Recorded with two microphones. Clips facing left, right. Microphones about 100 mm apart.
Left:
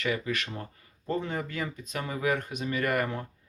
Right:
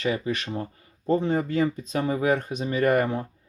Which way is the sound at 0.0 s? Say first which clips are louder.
Right 4 dB; 30° right (ahead or behind).